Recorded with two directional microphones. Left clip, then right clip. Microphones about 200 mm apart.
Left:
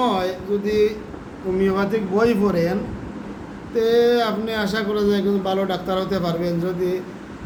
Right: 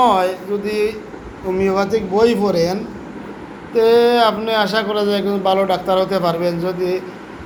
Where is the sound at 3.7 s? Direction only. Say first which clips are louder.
Right 5 dB; 10° left (ahead or behind).